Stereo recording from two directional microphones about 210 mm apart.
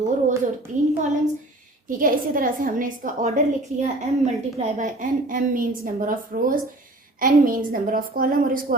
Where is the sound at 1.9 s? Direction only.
40° right (ahead or behind).